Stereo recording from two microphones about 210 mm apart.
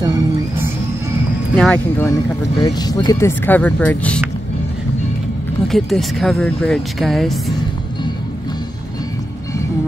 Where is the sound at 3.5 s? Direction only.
5° left (ahead or behind).